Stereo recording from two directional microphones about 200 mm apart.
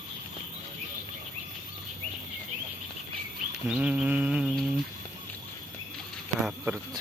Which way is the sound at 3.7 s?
5° right (ahead or behind).